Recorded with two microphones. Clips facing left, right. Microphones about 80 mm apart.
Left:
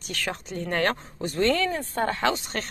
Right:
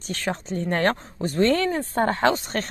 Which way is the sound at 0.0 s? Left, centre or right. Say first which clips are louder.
Right 4 dB; right.